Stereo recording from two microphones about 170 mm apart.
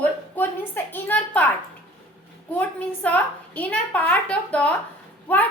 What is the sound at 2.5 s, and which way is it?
A woman's voice, 10° left (ahead or behind).